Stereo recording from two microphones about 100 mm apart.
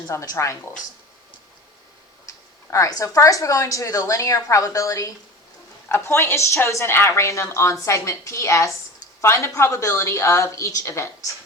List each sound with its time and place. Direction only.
0.1 s a woman's voice: 30° left (ahead or behind)
2.6 s a woman's voice: 35° left (ahead or behind)